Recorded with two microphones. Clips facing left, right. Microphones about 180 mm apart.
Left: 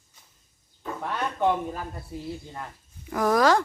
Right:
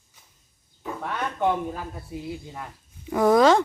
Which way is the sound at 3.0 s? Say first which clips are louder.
Right 4 dB; 20° right (ahead or behind).